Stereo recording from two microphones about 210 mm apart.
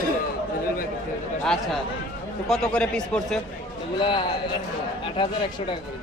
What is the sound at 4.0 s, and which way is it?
Speech, 25° left (ahead or behind).